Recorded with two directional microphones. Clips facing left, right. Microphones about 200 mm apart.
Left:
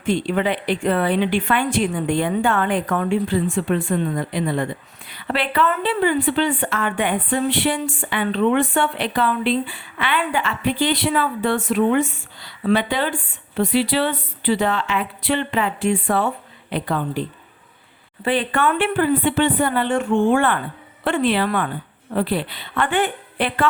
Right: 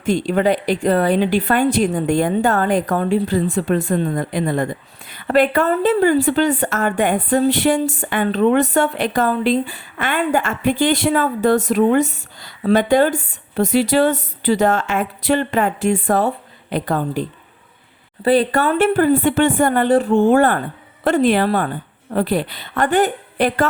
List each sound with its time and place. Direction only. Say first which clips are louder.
0.0 s speech: right 3 dB; 40° right (ahead or behind)